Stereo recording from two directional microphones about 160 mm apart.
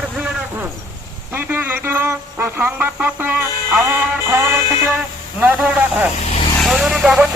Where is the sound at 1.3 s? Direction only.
10° right (ahead or behind).